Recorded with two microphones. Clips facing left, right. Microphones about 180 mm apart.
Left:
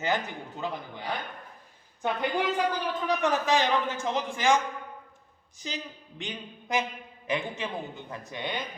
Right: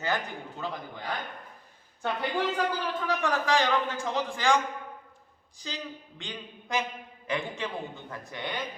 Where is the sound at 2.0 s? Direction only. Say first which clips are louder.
Left 1 dB; 15° left (ahead or behind).